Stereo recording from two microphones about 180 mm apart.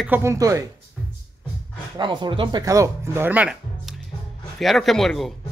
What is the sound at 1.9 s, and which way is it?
A man's voice, 25° right (ahead or behind).